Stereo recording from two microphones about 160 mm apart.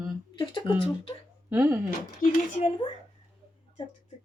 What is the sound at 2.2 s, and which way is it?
Speech, 60° left (ahead or behind).